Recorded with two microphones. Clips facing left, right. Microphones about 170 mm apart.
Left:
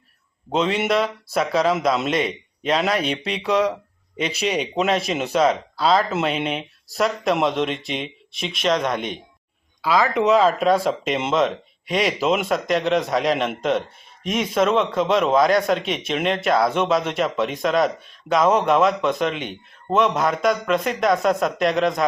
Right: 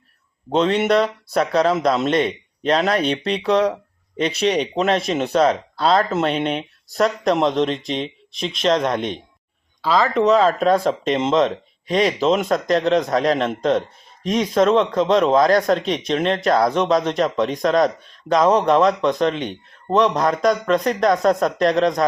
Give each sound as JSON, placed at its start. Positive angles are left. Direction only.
{"t": 0.5, "sound": "speech", "side_deg": 5}
{"t": 3.2, "sound": "speech", "side_deg": -35}
{"t": 4.2, "sound": "speech", "side_deg": 5}